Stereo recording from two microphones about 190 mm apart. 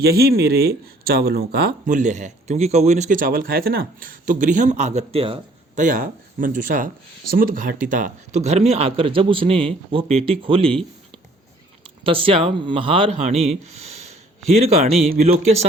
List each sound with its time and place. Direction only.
0.0 s speech: 55° right (ahead or behind)
1.9 s speech: 40° right (ahead or behind)
5.8 s speech: 45° right (ahead or behind); by 10.8 s 30° right (ahead or behind)
11.8 s a man's voice: 30° right (ahead or behind)